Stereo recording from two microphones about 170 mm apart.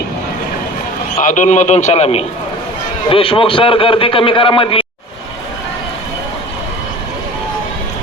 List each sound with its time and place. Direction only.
1.2 s a man's voice: 50° left (ahead or behind); by 4.9 s 30° left (ahead or behind)